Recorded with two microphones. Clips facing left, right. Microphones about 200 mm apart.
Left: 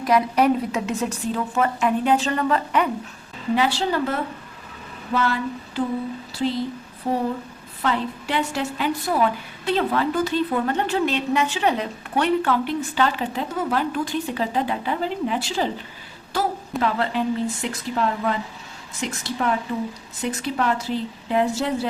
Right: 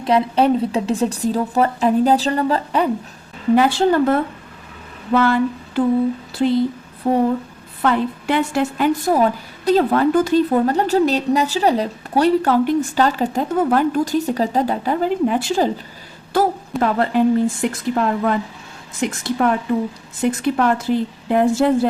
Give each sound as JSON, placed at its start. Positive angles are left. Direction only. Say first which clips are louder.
{"t": 0.0, "sound": "a woman's voice", "louder": "right 3 dB", "side_deg": -30}
{"t": 3.5, "sound": "a woman's voice", "louder": "right 7 dB", "side_deg": -50}
{"t": 7.1, "sound": "a woman's voice", "louder": "right 7 dB", "side_deg": -60}
{"t": 16.8, "sound": "a woman's voice", "louder": "right 7 dB", "side_deg": -50}